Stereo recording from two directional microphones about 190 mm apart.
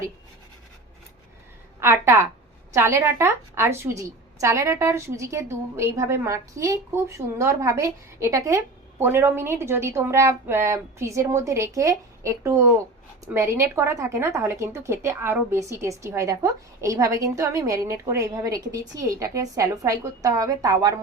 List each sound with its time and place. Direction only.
1.8 s a woman's voice: 15° right (ahead or behind)